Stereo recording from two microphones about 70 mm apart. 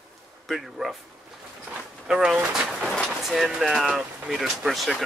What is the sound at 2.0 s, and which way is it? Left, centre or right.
Speech, centre.